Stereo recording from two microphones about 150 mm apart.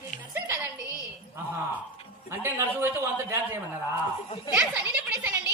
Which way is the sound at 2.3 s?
15° right (ahead or behind).